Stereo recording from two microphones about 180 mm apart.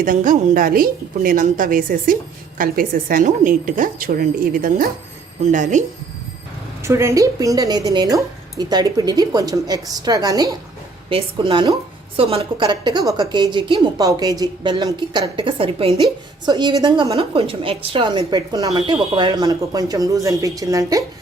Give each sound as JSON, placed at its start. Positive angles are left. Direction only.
{"t": 0.0, "sound": "a woman's voice", "side_deg": -50}
{"t": 6.8, "sound": "a woman's voice", "side_deg": -15}